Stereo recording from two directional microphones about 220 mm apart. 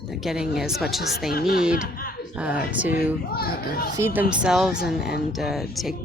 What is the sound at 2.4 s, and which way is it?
Speech, 5° right (ahead or behind).